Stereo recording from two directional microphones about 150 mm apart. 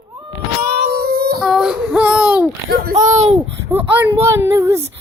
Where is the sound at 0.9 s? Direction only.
90° right.